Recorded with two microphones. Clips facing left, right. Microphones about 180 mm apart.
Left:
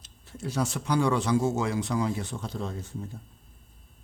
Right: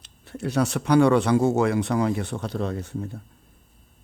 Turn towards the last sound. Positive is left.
turn(degrees=-70)  # may be behind; listen again after turning